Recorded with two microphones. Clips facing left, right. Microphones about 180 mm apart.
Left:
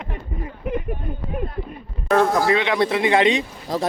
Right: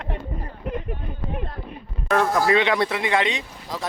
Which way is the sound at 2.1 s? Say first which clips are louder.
Left 3 dB; 30° left (ahead or behind).